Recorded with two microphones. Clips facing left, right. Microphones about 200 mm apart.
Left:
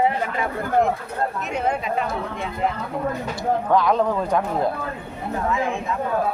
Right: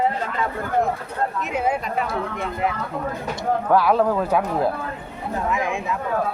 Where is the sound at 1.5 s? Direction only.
5° right (ahead or behind).